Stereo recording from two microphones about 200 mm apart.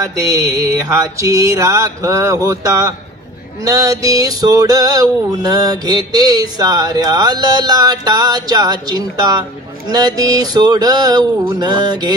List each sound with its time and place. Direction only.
0.0 s mantra: 15° right (ahead or behind)
3.6 s male singing: 20° right (ahead or behind)